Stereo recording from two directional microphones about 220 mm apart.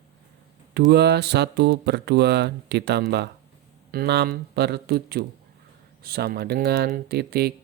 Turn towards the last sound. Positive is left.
turn(degrees=-45)  # may be behind; listen again after turning